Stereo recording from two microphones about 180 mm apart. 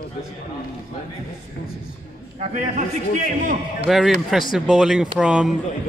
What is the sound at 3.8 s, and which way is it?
Speech, centre (ahead or behind).